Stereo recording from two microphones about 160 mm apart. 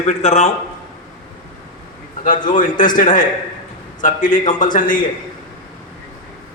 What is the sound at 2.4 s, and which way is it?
A man's voice, 55° left (ahead or behind).